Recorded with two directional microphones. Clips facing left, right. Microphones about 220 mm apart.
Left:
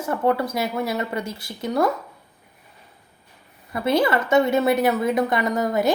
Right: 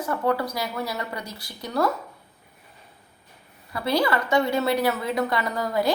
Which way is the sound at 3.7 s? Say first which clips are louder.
Left 3 dB; 25° left (ahead or behind).